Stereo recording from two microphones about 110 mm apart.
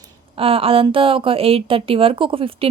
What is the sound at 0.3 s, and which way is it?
A woman's voice, 60° right (ahead or behind).